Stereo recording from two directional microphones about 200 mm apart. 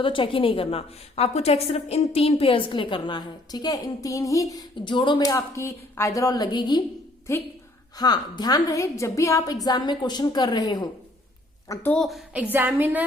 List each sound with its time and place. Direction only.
0.0 s a woman's voice: 25° left (ahead or behind)
11.7 s a woman's voice: 10° left (ahead or behind); by 13.1 s 10° right (ahead or behind)